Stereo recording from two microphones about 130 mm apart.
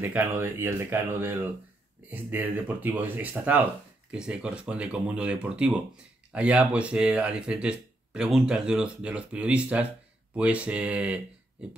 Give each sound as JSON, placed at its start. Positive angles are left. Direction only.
{"t": 0.0, "sound": "speech", "side_deg": -15}